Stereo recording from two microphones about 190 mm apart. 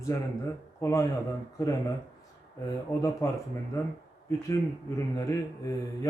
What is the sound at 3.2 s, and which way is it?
Speech, 15° left (ahead or behind).